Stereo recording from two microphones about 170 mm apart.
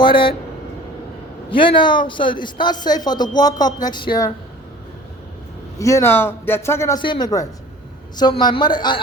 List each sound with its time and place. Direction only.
0.0 s speech: 30° left (ahead or behind)
1.5 s speech: 30° left (ahead or behind)
5.8 s speech: 15° left (ahead or behind)